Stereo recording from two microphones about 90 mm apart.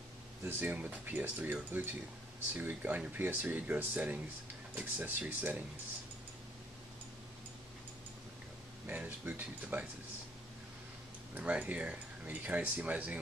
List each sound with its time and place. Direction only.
0.5 s speech: 20° right (ahead or behind)
8.8 s speech: 20° right (ahead or behind)
11.3 s speech: 15° right (ahead or behind)